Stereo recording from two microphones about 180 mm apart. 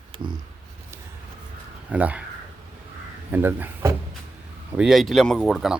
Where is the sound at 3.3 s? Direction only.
10° right (ahead or behind).